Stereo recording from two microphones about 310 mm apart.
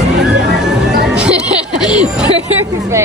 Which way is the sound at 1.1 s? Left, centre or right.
Centre.